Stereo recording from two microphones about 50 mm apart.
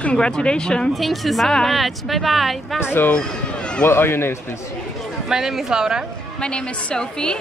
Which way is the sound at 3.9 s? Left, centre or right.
Left.